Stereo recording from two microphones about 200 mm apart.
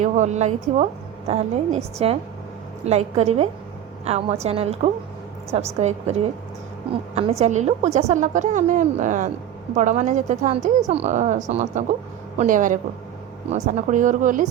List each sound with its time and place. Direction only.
0.0 s a woman's voice: 35° right (ahead or behind)